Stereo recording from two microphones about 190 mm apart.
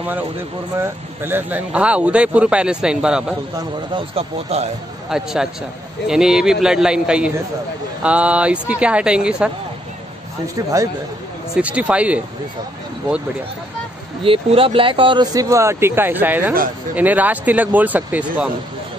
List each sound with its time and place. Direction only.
0.7 s speech: 15° right (ahead or behind)
3.5 s speech: 30° right (ahead or behind)
5.1 s a man's voice: 5° right (ahead or behind)
11.5 s speech: 5° right (ahead or behind)
14.2 s speech: 30° right (ahead or behind); by 18.5 s 10° right (ahead or behind)